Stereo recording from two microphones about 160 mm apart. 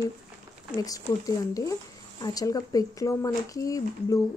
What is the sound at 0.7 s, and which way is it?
Speech, 20° left (ahead or behind).